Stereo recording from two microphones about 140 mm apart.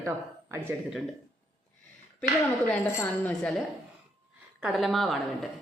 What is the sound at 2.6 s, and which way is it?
Speech, 10° left (ahead or behind).